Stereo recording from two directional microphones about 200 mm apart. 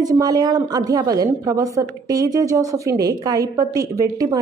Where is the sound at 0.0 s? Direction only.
20° right (ahead or behind).